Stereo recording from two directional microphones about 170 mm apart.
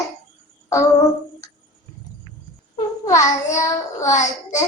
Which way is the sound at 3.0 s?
20° left (ahead or behind).